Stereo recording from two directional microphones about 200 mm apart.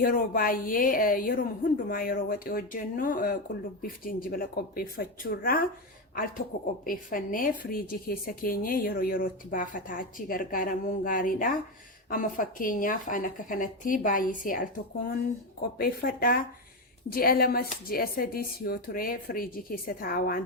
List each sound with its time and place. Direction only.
0.0 s a woman's voice: 45° left (ahead or behind)
6.8 s a woman's voice: 45° left (ahead or behind)